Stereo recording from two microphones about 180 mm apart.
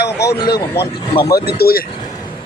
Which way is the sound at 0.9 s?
25° left (ahead or behind).